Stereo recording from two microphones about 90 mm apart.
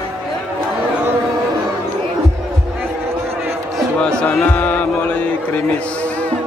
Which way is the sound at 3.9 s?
10° left (ahead or behind).